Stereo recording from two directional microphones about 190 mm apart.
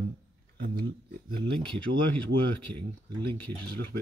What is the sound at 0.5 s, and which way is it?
Speech, 60° right (ahead or behind).